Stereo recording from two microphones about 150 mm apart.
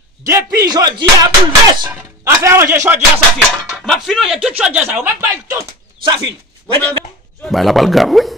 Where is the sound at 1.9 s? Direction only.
10° right (ahead or behind).